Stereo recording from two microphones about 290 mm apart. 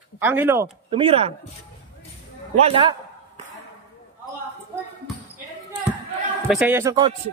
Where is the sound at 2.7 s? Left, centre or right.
Centre.